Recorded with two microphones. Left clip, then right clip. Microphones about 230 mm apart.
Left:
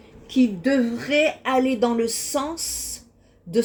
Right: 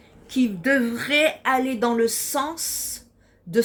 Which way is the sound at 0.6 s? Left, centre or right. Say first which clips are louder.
Right 1 dB; right.